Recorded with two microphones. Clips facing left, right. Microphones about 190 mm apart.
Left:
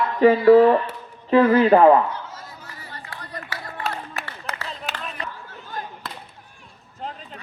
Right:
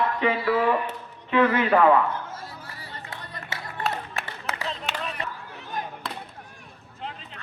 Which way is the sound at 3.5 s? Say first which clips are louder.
Right 1 dB; 25° right (ahead or behind).